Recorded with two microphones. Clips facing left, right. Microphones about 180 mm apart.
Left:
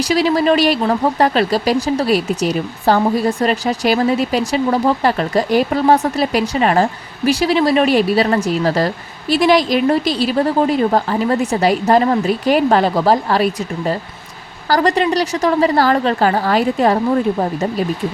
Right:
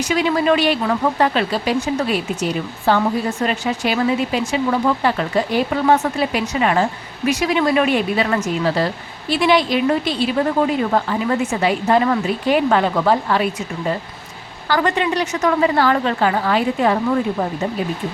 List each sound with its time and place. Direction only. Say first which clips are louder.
0.0 s speech: left 3 dB; 35° left (ahead or behind)